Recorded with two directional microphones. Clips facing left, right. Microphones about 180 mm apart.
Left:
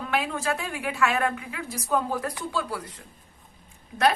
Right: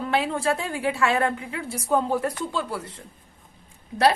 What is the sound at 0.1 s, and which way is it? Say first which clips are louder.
A woman's voice: right 3 dB; 30° right (ahead or behind).